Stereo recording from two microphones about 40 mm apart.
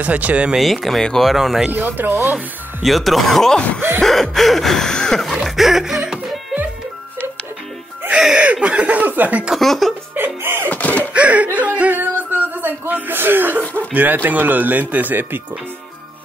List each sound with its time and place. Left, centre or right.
0.0 s speech: right
0.6 s speech: centre
1.7 s speech: right
2.3 s speech: centre
4.0 s gasp: centre
5.2 s speech: centre
8.4 s speech: right
9.6 s speech: centre
10.1 s music: right
10.7 s door: left
11.1 s laughter: right
11.5 s yodeling: right
12.0 s a sound: right
13.0 s speech: right